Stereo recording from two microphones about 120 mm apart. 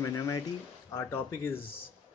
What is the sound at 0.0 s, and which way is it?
Speech, 25° left (ahead or behind).